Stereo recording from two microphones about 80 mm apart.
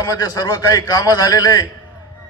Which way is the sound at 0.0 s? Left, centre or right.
Left.